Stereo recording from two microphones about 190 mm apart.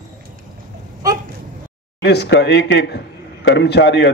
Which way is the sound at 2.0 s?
60° left (ahead or behind).